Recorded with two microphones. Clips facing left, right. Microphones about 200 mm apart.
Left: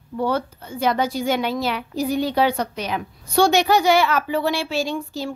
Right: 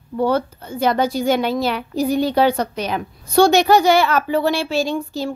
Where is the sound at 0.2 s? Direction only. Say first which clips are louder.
Right 4 dB; 35° right (ahead or behind).